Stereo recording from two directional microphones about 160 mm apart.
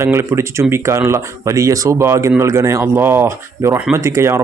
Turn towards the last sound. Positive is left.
turn(degrees=-15)  # may be behind; listen again after turning